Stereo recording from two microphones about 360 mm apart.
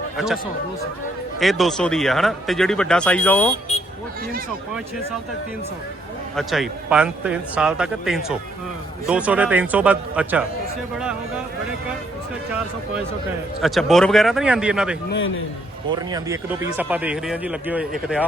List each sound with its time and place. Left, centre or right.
1.4 s speech: centre
6.3 s speech: centre
13.6 s speech: centre
15.1 s a man's voice: left
15.9 s speech: centre